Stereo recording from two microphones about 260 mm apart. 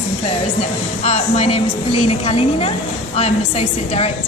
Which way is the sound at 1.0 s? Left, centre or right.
Left.